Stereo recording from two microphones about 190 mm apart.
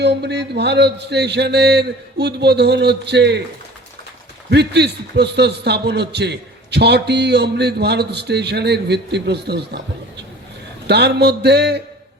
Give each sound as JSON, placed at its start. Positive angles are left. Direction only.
{"t": 0.0, "sound": "a man's voice", "side_deg": -60}
{"t": 4.4, "sound": "a man's voice", "side_deg": -60}